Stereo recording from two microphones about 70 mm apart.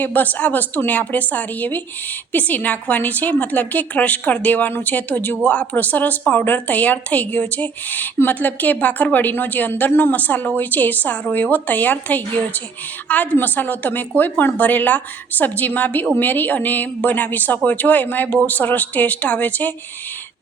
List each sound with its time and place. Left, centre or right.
0.0 s a woman's voice: left
13.3 s a woman's voice: left